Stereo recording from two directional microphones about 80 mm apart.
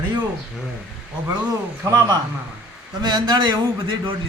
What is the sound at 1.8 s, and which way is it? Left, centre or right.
Speech, right.